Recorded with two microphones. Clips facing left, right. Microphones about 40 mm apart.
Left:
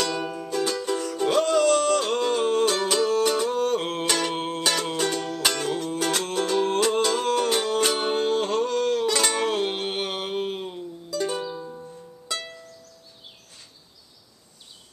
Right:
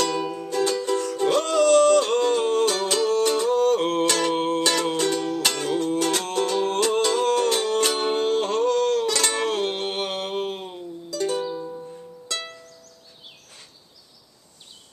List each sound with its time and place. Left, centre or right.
0.0 s music: centre